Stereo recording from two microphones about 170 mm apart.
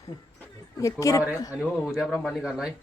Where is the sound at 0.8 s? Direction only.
20° left (ahead or behind).